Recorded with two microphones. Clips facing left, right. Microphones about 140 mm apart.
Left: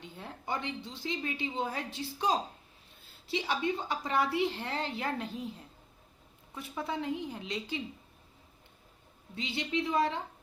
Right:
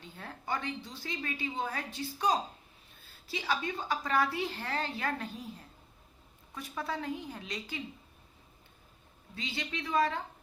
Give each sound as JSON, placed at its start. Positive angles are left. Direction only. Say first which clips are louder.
{"t": 0.0, "sound": "a woman's voice", "louder": "left 1 dB", "side_deg": 20}
{"t": 6.5, "sound": "a woman's voice", "louder": "left 1 dB", "side_deg": 20}
{"t": 9.3, "sound": "a woman's voice", "louder": "left 5 dB", "side_deg": 25}